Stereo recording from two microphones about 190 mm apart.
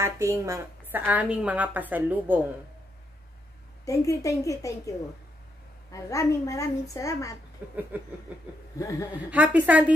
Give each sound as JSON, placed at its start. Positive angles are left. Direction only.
{"t": 0.0, "sound": "a woman's voice", "side_deg": -15}
{"t": 3.8, "sound": "a woman's voice", "side_deg": 15}
{"t": 7.6, "sound": "a woman's voice", "side_deg": -5}
{"t": 8.7, "sound": "a woman's voice", "side_deg": 15}
{"t": 9.3, "sound": "a woman's voice", "side_deg": -10}